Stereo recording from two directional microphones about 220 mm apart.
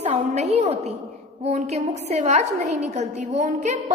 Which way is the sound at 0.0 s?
30° right (ahead or behind).